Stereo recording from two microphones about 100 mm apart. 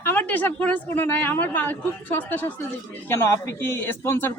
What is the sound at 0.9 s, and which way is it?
Speech, 20° left (ahead or behind).